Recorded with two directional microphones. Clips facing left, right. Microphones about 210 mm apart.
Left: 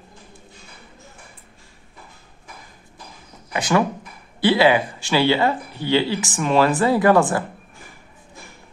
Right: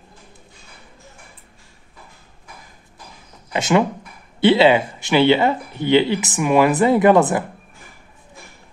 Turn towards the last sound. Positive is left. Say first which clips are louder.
# right 2 dB
turn(degrees=-20)  # may be behind; listen again after turning